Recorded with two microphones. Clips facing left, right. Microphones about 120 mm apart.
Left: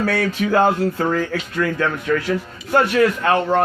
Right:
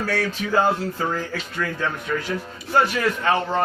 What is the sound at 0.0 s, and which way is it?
Speech, 70° left (ahead or behind).